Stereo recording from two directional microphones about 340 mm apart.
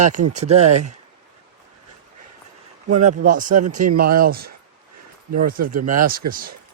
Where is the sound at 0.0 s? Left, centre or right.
Right.